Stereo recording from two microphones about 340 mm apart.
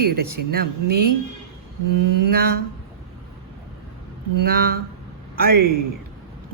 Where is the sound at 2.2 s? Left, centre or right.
Right.